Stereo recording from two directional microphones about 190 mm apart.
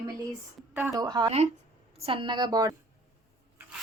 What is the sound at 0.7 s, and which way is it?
A woman's voice, 15° right (ahead or behind).